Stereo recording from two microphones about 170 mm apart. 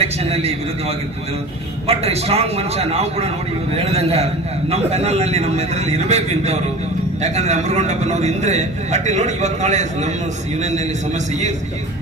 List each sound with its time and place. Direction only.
0.0 s a man's voice: 35° right (ahead or behind)